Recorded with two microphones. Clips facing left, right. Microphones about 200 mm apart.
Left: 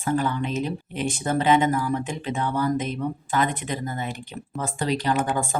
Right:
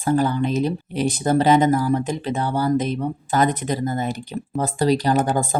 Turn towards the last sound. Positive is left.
turn(degrees=-40)  # may be behind; listen again after turning